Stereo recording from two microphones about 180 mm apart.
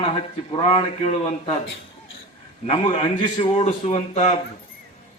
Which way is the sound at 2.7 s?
30° left (ahead or behind).